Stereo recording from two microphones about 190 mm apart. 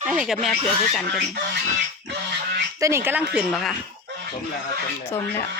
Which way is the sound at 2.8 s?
15° right (ahead or behind).